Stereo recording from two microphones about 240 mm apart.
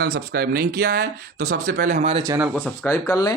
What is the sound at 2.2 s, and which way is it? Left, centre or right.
Speech, centre.